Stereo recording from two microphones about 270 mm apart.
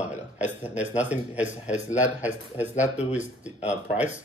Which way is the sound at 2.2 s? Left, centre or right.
Centre.